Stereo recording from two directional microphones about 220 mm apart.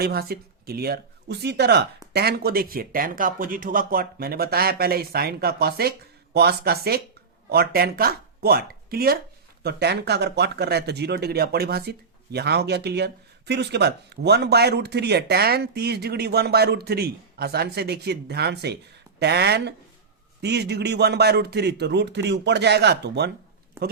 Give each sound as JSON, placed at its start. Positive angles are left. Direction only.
{"t": 0.0, "sound": "speech", "side_deg": -45}